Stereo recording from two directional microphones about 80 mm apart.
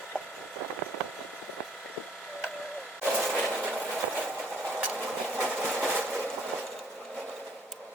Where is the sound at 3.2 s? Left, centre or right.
Centre.